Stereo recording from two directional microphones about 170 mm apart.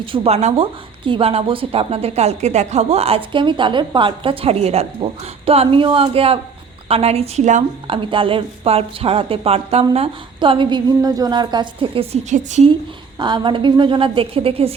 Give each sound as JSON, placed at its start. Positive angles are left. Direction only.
{"t": 0.0, "sound": "a woman's voice", "side_deg": -35}
{"t": 7.9, "sound": "a woman's voice", "side_deg": -30}
{"t": 12.3, "sound": "a woman's voice", "side_deg": -45}
{"t": 13.1, "sound": "a woman's voice", "side_deg": -25}